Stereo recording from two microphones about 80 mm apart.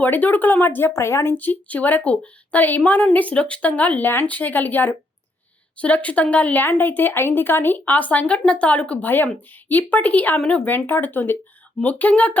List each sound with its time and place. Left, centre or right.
0.0 s speech: left
10.7 s speech: left